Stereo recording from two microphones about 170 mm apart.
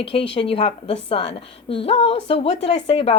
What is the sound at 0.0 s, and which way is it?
Speech, 30° left (ahead or behind).